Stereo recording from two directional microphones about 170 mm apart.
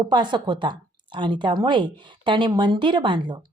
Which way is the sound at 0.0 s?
25° right (ahead or behind).